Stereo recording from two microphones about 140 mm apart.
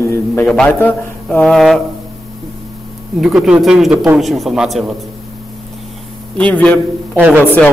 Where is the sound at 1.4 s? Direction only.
Centre (ahead or behind).